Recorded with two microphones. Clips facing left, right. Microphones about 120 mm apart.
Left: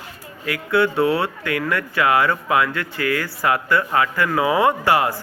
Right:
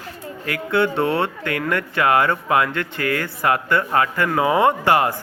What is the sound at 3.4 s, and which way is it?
Speech, 30° right (ahead or behind).